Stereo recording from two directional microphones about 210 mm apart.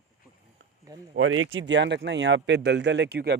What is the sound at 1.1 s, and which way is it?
Speech, 70° right (ahead or behind).